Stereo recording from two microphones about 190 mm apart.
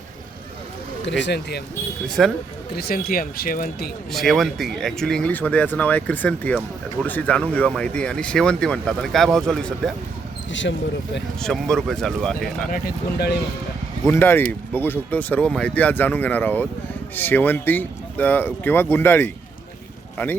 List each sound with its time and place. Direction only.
1.2 s speech: 60° left (ahead or behind)
2.0 s speech: centre (ahead or behind)
2.7 s speech: 55° left (ahead or behind)
4.1 s speech: centre (ahead or behind)
10.5 s speech: 75° left (ahead or behind)
11.3 s speech: centre (ahead or behind)
12.7 s speech: 55° left (ahead or behind)
14.1 s speech: 10° left (ahead or behind)